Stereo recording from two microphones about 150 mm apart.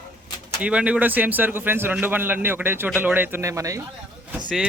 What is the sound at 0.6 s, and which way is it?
Speech, 10° right (ahead or behind).